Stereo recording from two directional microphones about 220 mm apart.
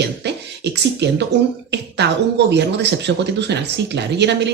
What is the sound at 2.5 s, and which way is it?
Speech, 50° right (ahead or behind).